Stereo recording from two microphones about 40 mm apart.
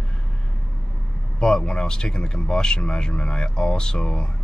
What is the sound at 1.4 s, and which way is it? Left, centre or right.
Speech, centre.